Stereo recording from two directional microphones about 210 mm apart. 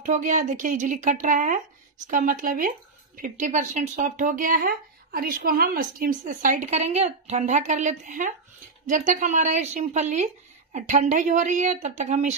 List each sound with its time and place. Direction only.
0.0 s speech: 35° right (ahead or behind)